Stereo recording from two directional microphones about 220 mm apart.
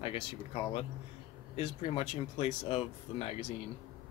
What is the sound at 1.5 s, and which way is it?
Speech, 25° left (ahead or behind).